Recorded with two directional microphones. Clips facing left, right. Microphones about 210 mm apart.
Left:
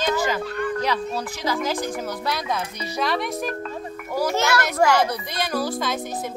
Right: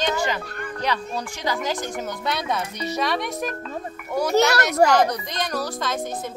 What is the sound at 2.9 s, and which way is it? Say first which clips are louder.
Speech: left 1 dB; centre (ahead or behind).